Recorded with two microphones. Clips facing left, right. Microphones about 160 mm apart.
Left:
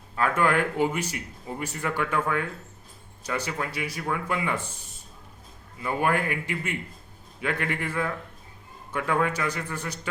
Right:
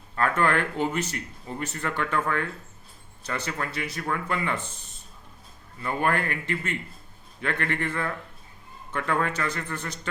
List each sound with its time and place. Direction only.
0.2 s speech: 10° left (ahead or behind)